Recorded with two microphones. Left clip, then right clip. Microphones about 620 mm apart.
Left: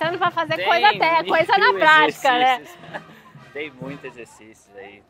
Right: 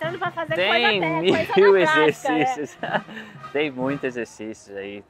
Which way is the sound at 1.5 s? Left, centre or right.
Left.